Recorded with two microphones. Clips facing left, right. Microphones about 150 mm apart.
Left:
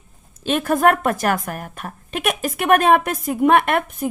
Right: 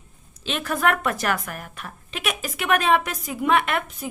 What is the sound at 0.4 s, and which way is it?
A woman's voice, 45° left (ahead or behind).